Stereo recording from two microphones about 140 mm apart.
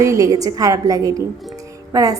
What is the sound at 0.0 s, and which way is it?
A woman's voice, 20° right (ahead or behind).